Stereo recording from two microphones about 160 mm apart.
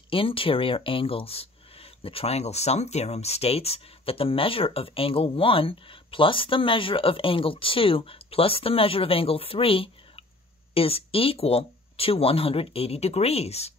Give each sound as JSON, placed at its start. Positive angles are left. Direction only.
{"t": 0.1, "sound": "speech", "side_deg": 35}